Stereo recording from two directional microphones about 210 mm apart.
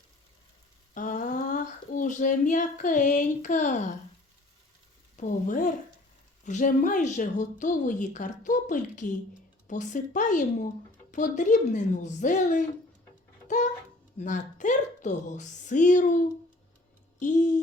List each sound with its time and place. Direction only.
0.9 s speech: 35° left (ahead or behind)
5.1 s a woman's voice: 35° left (ahead or behind)
14.2 s a woman's voice: 35° left (ahead or behind)
17.2 s a woman's voice: 35° left (ahead or behind)